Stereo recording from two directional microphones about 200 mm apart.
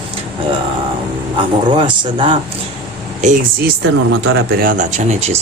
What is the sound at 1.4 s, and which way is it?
Speech, 25° right (ahead or behind).